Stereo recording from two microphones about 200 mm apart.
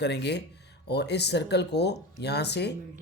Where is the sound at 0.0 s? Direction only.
55° left (ahead or behind).